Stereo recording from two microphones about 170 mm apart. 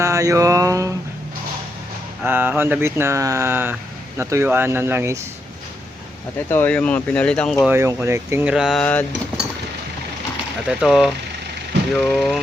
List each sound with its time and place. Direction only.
0.0 s mantra: 20° right (ahead or behind)
2.2 s speech: 10° right (ahead or behind)
6.5 s speech: 10° left (ahead or behind)
7.7 s speech: 15° right (ahead or behind)
8.5 s speech: centre (ahead or behind)
8.8 s speech: 10° left (ahead or behind)
10.7 s speech: 5° right (ahead or behind)